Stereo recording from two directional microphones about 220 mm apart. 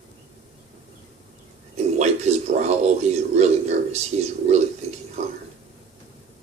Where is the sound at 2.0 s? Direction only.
30° right (ahead or behind).